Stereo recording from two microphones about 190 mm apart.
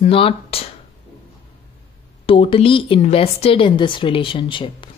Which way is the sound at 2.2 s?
30° left (ahead or behind).